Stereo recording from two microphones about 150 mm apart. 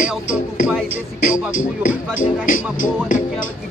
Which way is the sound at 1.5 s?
65° left (ahead or behind).